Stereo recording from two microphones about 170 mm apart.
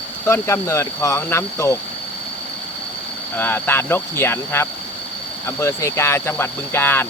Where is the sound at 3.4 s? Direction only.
15° left (ahead or behind).